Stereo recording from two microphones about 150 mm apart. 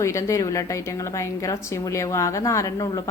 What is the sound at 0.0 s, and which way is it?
A woman's voice, 20° left (ahead or behind).